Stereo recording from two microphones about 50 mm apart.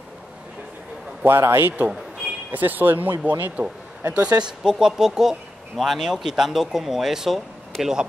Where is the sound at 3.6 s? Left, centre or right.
Right.